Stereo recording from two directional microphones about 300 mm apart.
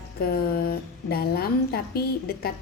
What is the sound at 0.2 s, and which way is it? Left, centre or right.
A woman's voice, left.